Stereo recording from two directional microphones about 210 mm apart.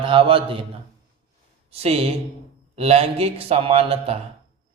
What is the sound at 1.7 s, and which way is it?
Speech, 30° right (ahead or behind).